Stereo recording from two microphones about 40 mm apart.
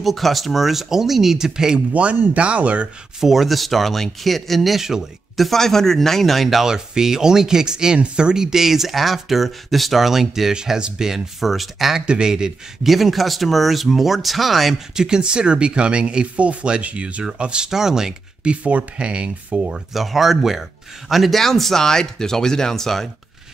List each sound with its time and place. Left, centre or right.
0.0 s speech: centre
2.3 s speech: right
3.2 s speech: centre
5.4 s speech: centre
6.6 s speech: centre
10.5 s speech: centre
12.1 s speech: centre
12.8 s speech: centre
15.0 s speech: centre; by 17.2 s right
17.2 s speech: right
17.6 s speech: centre
18.4 s speech: right
19.9 s speech: centre
21.8 s speech: centre